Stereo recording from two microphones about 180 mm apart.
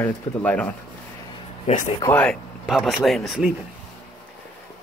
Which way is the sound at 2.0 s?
10° left (ahead or behind).